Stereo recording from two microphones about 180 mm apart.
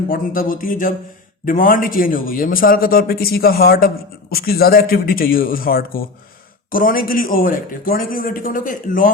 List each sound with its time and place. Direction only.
0.1 s a man's voice: 50° left (ahead or behind)